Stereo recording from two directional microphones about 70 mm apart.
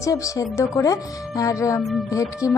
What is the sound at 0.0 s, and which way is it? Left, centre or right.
Music, left.